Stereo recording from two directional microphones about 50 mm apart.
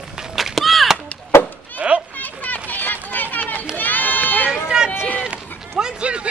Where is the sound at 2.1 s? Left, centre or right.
Left.